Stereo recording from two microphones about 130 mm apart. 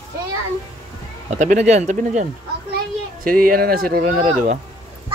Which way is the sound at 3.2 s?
90° right.